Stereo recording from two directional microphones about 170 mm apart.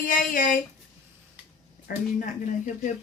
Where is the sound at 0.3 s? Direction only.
55° left (ahead or behind).